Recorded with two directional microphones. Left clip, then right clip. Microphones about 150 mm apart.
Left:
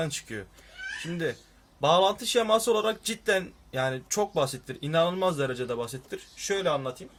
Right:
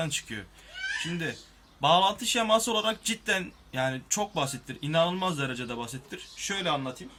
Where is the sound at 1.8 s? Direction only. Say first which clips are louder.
Even; 60° left (ahead or behind).